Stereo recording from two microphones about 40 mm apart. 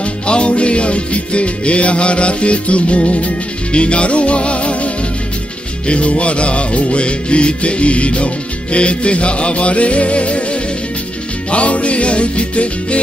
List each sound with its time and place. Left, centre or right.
0.0 s music: left